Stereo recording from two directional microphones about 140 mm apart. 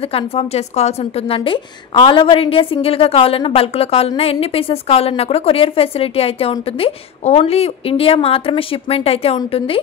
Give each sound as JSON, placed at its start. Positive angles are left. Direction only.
{"t": 0.1, "sound": "a woman's voice", "side_deg": 45}